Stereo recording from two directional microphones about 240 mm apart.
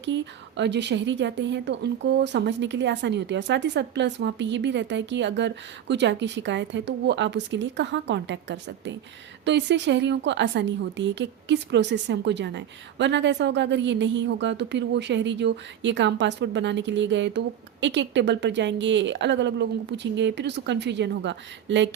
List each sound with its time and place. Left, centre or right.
0.0 s a woman's voice: right